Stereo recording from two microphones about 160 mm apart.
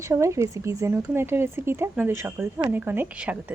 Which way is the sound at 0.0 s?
20° right (ahead or behind).